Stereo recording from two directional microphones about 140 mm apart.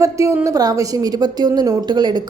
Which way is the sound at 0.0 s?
20° right (ahead or behind).